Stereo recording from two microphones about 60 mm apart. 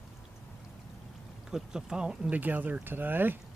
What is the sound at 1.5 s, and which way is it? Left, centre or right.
Speech, centre.